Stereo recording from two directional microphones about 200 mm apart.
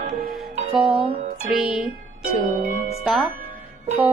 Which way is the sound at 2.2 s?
40° right (ahead or behind).